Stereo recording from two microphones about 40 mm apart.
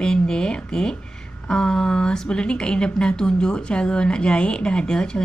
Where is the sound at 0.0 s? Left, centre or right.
Centre.